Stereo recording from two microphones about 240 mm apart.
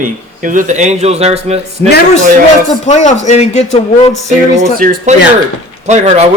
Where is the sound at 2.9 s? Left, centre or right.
Left.